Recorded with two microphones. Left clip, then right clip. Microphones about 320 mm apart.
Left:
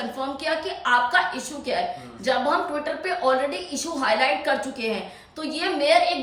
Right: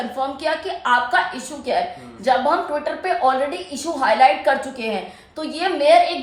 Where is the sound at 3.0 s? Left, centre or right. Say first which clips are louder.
Right 4 dB; centre.